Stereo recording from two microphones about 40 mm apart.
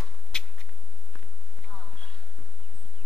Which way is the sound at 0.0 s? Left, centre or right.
Centre.